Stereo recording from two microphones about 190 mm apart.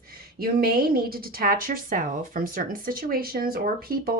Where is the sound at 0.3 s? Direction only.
50° right (ahead or behind).